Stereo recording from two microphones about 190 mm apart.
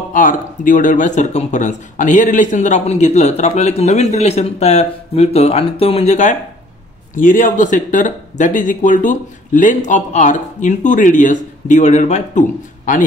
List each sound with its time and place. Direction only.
0.1 s speech: 45° left (ahead or behind)